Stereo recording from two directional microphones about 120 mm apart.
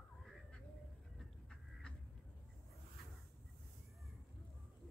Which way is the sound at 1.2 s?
5° left (ahead or behind).